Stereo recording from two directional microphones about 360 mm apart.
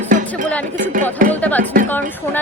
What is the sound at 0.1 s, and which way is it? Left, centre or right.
Music, right.